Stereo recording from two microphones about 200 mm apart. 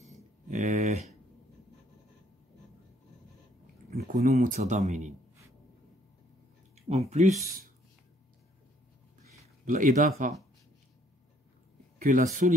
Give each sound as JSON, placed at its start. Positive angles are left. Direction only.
{"t": 0.0, "sound": "a sound", "side_deg": -35}
{"t": 3.9, "sound": "speech", "side_deg": -35}
{"t": 7.1, "sound": "speech", "side_deg": -35}
{"t": 9.7, "sound": "speech", "side_deg": -40}
{"t": 12.0, "sound": "speech", "side_deg": -40}